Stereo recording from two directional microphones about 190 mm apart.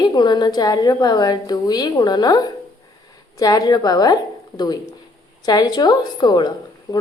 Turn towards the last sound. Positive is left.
turn(degrees=20)  # may be behind; listen again after turning